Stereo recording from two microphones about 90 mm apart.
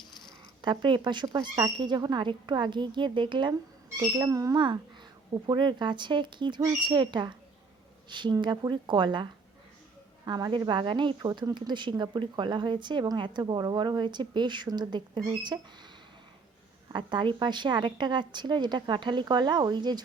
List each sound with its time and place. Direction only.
0.6 s speech: 60° right (ahead or behind)
4.2 s speech: 40° right (ahead or behind)
4.5 s a woman's voice: 55° right (ahead or behind)
10.7 s speech: 60° right (ahead or behind)
11.3 s a woman's voice: 50° right (ahead or behind)
16.9 s speech: 55° right (ahead or behind)